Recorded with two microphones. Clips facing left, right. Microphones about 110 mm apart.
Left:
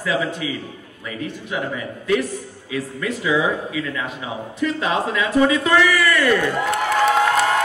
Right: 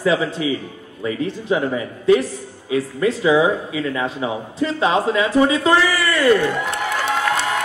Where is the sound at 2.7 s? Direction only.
30° right (ahead or behind).